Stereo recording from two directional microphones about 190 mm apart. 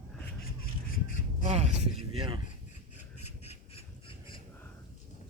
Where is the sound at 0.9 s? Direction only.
45° left (ahead or behind).